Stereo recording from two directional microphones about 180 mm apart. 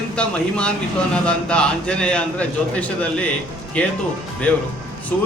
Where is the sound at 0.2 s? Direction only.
5° left (ahead or behind).